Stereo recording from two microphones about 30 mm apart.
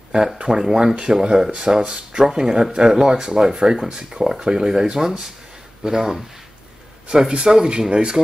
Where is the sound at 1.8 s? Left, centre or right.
Right.